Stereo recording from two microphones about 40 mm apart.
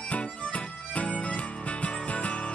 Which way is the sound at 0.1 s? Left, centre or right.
Left.